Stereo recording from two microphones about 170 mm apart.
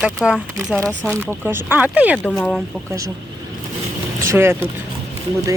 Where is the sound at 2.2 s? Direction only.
5° left (ahead or behind).